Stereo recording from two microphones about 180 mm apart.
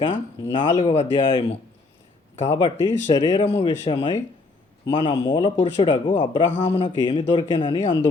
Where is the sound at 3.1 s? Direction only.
30° left (ahead or behind).